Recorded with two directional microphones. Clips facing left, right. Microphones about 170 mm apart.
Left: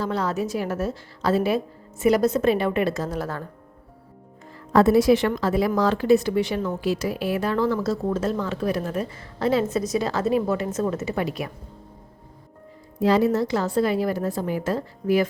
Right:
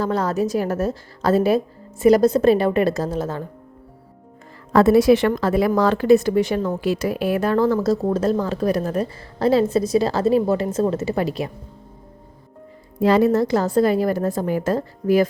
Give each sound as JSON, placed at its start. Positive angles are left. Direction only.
{"t": 0.0, "sound": "speech", "side_deg": -45}
{"t": 3.2, "sound": "speech", "side_deg": -20}
{"t": 4.7, "sound": "speech", "side_deg": -75}
{"t": 13.0, "sound": "a woman's voice", "side_deg": -55}